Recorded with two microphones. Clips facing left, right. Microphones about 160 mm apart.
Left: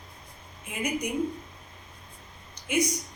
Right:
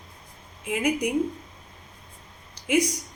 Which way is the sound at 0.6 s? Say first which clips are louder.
Right 6 dB; 80° right.